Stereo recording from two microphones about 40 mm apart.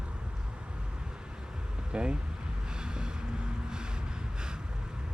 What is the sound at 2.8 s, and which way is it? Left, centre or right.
Vehicle, right.